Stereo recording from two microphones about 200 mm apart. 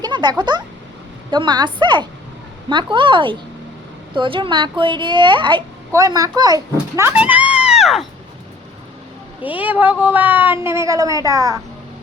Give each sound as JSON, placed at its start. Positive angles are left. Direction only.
{"t": 0.0, "sound": "speech", "side_deg": -20}
{"t": 9.4, "sound": "speech", "side_deg": -10}